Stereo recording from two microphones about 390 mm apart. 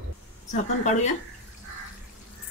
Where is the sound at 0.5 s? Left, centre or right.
Centre.